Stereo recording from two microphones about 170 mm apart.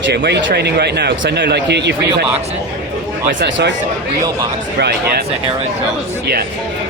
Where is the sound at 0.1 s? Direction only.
80° right.